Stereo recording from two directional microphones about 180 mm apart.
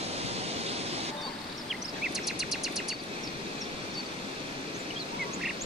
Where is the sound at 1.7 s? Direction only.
Centre (ahead or behind).